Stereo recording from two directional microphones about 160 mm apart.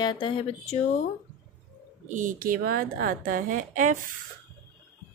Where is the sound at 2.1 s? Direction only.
55° right (ahead or behind).